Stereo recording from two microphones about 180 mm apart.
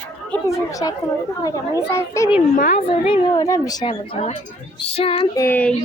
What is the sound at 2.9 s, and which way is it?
A woman's voice, 30° left (ahead or behind).